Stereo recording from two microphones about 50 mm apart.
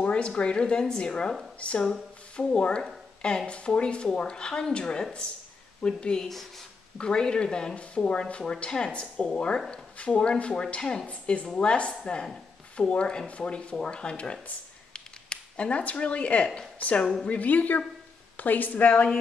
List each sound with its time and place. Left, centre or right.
0.0 s speech: left
14.9 s a sound: left
16.8 s a woman's voice: left